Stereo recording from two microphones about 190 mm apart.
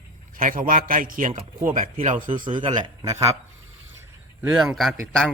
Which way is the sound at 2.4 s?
25° right (ahead or behind).